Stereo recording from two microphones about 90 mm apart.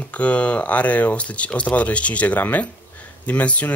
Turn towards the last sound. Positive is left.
turn(degrees=15)  # may be behind; listen again after turning